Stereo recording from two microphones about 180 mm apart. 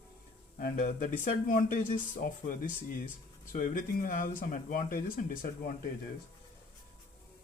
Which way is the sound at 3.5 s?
50° left (ahead or behind).